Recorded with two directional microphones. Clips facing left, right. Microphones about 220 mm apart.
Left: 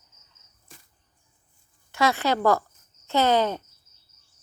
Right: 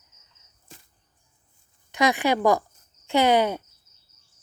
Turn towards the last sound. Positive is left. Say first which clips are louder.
# right 2 dB
turn(degrees=-15)  # may be behind; listen again after turning